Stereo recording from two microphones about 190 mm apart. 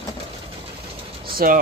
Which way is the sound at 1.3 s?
50° right (ahead or behind).